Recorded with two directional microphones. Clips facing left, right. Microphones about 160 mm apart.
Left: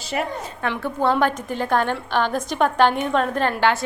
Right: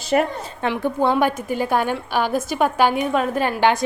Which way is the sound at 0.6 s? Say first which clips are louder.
Right 3 dB; 15° right (ahead or behind).